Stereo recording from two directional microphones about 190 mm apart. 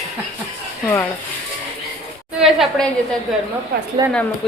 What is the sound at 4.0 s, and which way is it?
Speech, 20° right (ahead or behind).